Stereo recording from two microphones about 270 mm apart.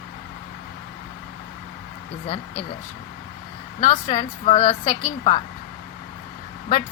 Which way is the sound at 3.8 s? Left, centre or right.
Left.